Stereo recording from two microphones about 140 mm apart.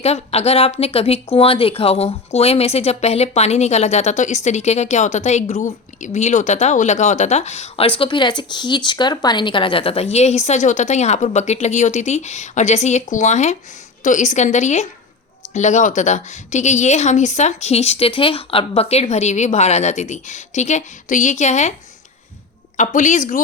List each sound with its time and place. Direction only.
0.0 s a woman's voice: 50° left (ahead or behind)
22.8 s a woman's voice: 65° left (ahead or behind)